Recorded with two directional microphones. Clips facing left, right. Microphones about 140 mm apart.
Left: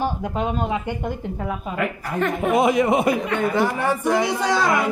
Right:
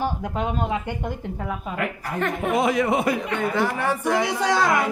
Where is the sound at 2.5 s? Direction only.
15° left (ahead or behind).